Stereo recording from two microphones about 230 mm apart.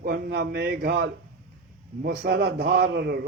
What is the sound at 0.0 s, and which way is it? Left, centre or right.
A man's voice, right.